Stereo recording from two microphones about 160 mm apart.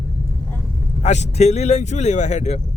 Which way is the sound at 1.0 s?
45° left (ahead or behind).